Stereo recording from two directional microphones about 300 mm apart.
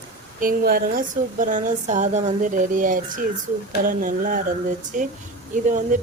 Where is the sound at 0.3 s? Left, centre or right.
Right.